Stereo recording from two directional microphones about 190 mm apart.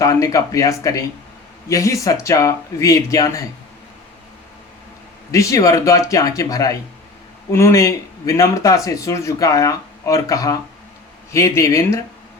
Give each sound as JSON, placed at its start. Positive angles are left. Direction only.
{"t": 0.0, "sound": "speech", "side_deg": 15}
{"t": 5.3, "sound": "speech", "side_deg": 15}